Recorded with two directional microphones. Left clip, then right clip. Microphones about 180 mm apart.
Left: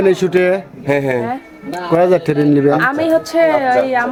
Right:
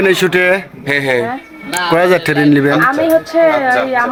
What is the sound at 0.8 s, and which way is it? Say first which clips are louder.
Speech: right 2 dB; 60° left (ahead or behind).